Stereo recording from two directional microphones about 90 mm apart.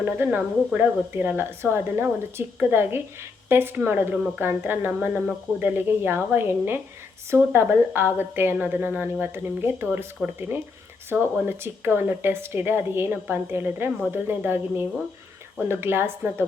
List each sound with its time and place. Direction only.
0.0 s a woman's voice: 20° right (ahead or behind)
11.1 s a woman's voice: 25° right (ahead or behind)